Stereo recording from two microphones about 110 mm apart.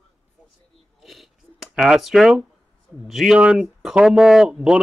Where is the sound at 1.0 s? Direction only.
Centre (ahead or behind).